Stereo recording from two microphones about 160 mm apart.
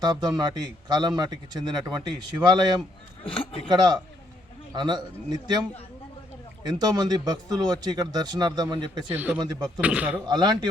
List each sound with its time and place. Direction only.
0.0 s a man's voice: 25° right (ahead or behind)
3.2 s speech: 35° left (ahead or behind)
3.7 s a man's voice: 25° right (ahead or behind)
6.7 s a man's voice: 25° right (ahead or behind)
9.0 s speech: 10° right (ahead or behind)
9.4 s a man's voice: 25° right (ahead or behind)
9.8 s speech: 10° right (ahead or behind)
10.2 s a man's voice: 25° right (ahead or behind)